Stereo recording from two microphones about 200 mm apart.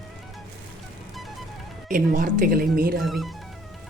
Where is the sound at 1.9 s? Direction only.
40° right (ahead or behind).